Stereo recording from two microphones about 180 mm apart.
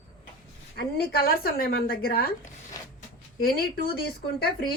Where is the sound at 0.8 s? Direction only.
60° left (ahead or behind).